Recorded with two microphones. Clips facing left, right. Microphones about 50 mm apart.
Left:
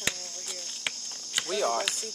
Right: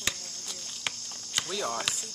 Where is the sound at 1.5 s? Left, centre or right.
Centre.